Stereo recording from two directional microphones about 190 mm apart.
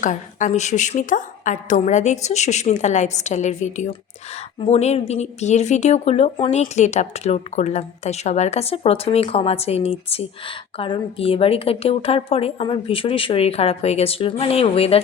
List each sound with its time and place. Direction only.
0.0 s a woman's voice: 40° left (ahead or behind)